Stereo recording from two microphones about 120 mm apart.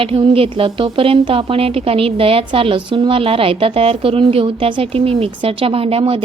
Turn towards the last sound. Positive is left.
turn(degrees=-50)  # may be behind; listen again after turning